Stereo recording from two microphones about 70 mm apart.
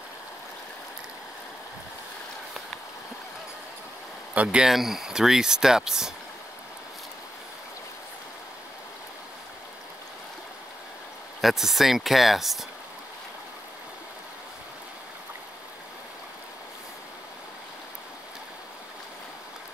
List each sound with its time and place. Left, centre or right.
4.3 s speech: centre
4.6 s speech: centre
11.4 s speech: centre